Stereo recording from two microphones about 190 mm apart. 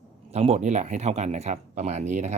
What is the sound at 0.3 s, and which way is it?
Speech, 35° right (ahead or behind).